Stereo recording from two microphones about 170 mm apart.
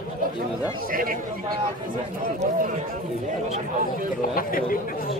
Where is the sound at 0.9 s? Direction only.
55° right (ahead or behind).